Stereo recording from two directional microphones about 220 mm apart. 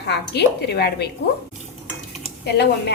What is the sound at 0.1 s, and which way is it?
Speech, 50° left (ahead or behind).